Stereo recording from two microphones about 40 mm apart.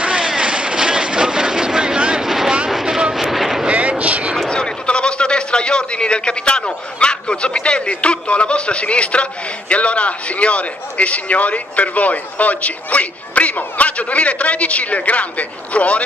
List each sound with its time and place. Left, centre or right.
0.0 s vehicle: right
2.0 s a sound: right
2.2 s vehicle: centre
3.2 s vehicle: centre
3.6 s vehicle: right
4.0 s a sound: right
4.5 s a man's voice: left